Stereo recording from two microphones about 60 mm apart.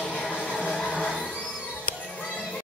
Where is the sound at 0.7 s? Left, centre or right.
Centre.